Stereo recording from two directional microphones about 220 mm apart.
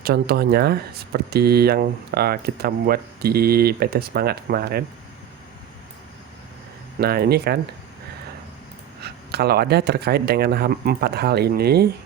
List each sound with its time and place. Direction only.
0.0 s speech: 45° right (ahead or behind)
7.0 s speech: 45° right (ahead or behind)
9.0 s speech: 45° right (ahead or behind)